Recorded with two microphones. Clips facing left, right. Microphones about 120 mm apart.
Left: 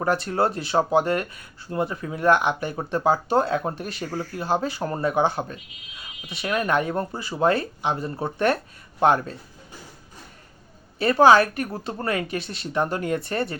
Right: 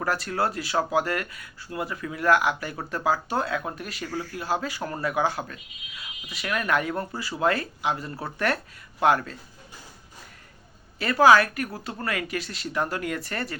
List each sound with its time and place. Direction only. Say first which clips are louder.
0.0 s speech: left 4 dB; 25° left (ahead or behind)
11.0 s speech: left 2 dB; 30° left (ahead or behind)